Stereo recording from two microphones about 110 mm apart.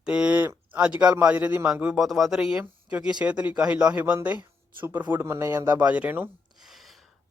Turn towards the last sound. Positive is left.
turn(degrees=0)  # may be behind; listen again after turning